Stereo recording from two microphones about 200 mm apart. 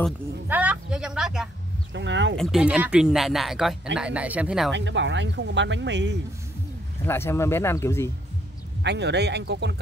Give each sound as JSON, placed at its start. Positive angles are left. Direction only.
{"t": 0.5, "sound": "speech", "side_deg": -5}
{"t": 2.0, "sound": "speech", "side_deg": -65}
{"t": 2.3, "sound": "speech", "side_deg": 0}
{"t": 4.7, "sound": "speech", "side_deg": -65}
{"t": 7.0, "sound": "speech", "side_deg": 10}
{"t": 8.8, "sound": "speech", "side_deg": -60}